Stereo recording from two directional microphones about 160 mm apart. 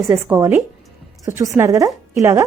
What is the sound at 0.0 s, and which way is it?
A woman's voice, 20° right (ahead or behind).